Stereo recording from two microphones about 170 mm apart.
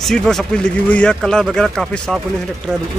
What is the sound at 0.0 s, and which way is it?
Speech, centre (ahead or behind).